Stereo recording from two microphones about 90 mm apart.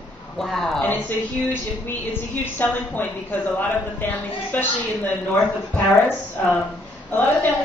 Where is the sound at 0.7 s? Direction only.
20° left (ahead or behind).